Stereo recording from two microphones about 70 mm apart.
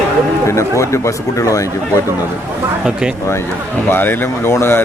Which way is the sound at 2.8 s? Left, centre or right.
Centre.